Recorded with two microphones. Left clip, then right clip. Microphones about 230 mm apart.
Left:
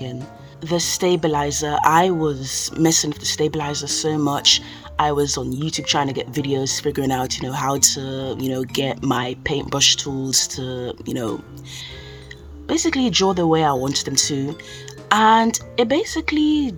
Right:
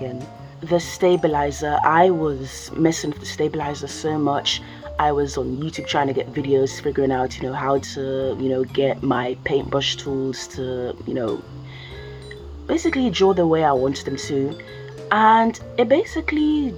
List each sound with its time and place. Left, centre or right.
0.6 s speech: left
12.6 s speech: left